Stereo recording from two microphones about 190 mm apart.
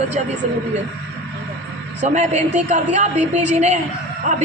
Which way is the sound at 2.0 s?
40° right (ahead or behind).